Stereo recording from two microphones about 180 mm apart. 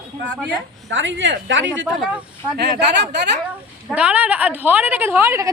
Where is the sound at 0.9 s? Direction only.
90° right.